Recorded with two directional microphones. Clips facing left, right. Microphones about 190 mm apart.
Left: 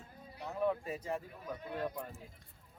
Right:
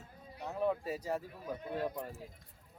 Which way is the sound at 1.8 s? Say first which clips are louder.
Right 2 dB; 5° right (ahead or behind).